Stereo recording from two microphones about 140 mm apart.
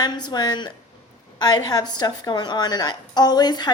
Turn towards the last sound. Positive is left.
turn(degrees=30)  # may be behind; listen again after turning